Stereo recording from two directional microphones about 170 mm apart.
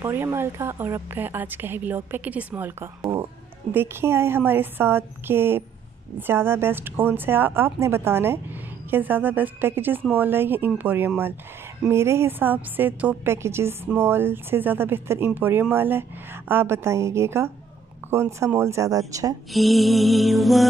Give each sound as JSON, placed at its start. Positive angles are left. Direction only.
{"t": 0.0, "sound": "a woman's voice", "side_deg": -15}
{"t": 19.5, "sound": "music", "side_deg": 0}